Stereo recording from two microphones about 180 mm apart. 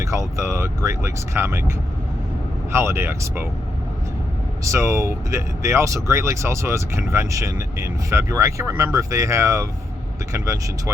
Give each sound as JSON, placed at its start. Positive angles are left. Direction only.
{"t": 0.0, "sound": "speech", "side_deg": -15}
{"t": 2.7, "sound": "speech", "side_deg": -15}
{"t": 4.6, "sound": "speech", "side_deg": -15}